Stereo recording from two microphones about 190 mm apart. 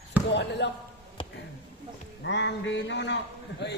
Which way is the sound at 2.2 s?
70° left (ahead or behind).